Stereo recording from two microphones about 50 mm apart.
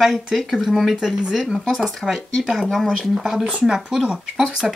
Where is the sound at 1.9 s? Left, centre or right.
Centre.